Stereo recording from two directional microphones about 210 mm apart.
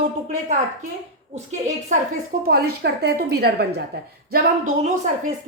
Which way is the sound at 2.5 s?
50° right (ahead or behind).